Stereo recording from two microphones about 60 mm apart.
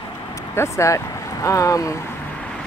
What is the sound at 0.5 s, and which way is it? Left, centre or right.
Speech, left.